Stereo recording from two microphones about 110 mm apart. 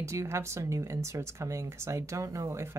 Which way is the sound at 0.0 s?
25° right (ahead or behind).